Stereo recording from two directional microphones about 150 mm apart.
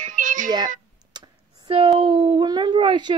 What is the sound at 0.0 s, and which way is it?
Meow, 60° right (ahead or behind).